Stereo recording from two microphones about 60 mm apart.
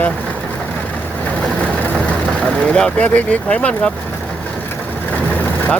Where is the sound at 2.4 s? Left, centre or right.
Centre.